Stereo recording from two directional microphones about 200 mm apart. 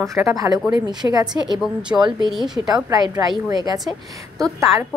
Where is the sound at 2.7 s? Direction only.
20° right (ahead or behind).